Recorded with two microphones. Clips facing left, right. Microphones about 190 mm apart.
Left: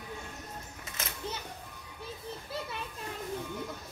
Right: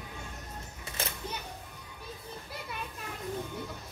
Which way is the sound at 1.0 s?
30° right (ahead or behind).